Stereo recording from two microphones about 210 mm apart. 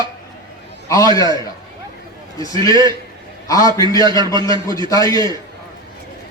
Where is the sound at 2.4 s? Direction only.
15° left (ahead or behind).